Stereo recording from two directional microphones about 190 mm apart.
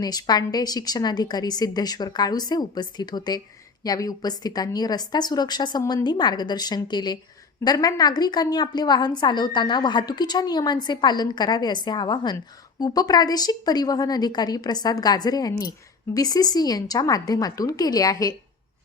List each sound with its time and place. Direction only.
0.0 s a woman's voice: 20° left (ahead or behind)